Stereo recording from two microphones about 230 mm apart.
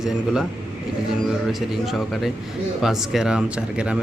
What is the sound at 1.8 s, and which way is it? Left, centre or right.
A man's voice, centre.